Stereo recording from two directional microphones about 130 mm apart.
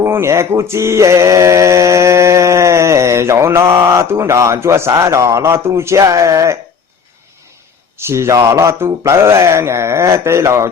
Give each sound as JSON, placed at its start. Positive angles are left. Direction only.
{"t": 0.0, "sound": "mantra", "side_deg": -20}
{"t": 7.9, "sound": "mantra", "side_deg": -20}